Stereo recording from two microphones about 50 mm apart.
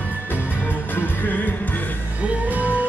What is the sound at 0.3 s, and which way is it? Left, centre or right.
Music, left.